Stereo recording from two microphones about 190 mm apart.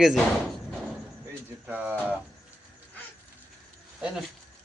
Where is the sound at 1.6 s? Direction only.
5° right (ahead or behind).